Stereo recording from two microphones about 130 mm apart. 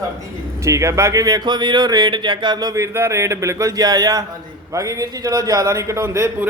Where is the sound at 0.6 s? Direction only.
25° right (ahead or behind).